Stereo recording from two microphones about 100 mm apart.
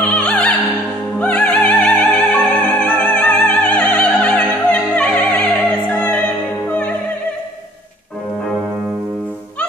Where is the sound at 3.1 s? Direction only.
15° left (ahead or behind).